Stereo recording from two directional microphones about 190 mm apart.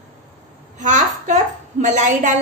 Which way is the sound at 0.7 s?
40° right (ahead or behind).